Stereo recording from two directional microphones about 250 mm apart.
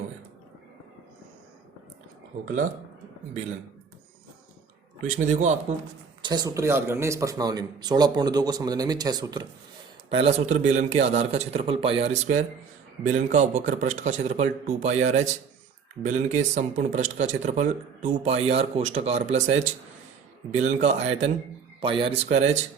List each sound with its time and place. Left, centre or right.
2.4 s speech: right
5.0 s speech: right
6.2 s speech: centre